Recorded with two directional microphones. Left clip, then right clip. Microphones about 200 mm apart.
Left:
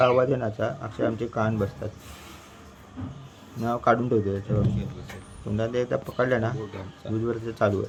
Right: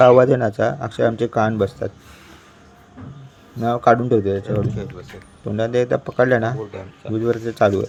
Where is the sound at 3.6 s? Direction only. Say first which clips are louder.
Right 7 dB; 30° right (ahead or behind).